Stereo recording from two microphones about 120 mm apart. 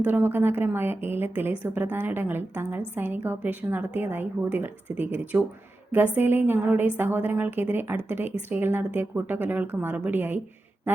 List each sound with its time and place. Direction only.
0.0 s a woman's voice: 15° right (ahead or behind)